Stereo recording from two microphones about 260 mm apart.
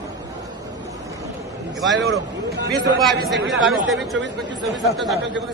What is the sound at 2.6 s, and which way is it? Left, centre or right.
Speech, right.